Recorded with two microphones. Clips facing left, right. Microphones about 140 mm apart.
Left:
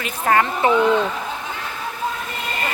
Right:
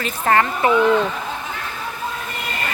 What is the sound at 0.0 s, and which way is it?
Speech, 10° left (ahead or behind).